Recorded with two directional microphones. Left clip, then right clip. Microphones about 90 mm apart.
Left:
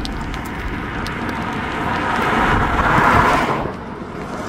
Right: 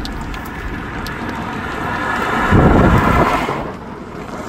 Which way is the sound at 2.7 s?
25° right (ahead or behind).